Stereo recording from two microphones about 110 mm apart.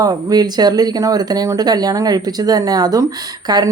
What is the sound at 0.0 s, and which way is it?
A woman's voice, 35° right (ahead or behind).